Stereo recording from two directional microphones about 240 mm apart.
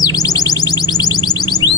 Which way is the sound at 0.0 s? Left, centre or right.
Centre.